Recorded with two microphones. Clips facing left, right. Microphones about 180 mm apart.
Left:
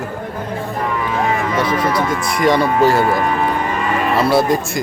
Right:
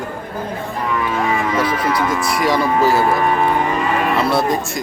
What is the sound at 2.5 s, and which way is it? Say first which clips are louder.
Speech: left 1 dB; 25° left (ahead or behind).